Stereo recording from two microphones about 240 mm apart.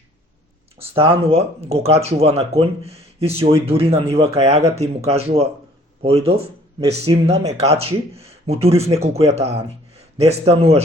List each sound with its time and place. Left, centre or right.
0.8 s speech: right